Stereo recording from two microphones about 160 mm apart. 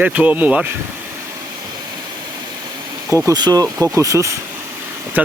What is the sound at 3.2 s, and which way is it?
Speech, 25° right (ahead or behind).